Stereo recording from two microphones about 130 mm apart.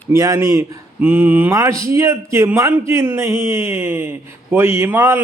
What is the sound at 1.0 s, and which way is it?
Speech, 10° right (ahead or behind).